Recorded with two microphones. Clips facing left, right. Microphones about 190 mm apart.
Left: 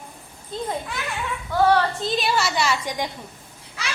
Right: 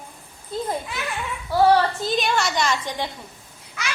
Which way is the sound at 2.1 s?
Centre (ahead or behind).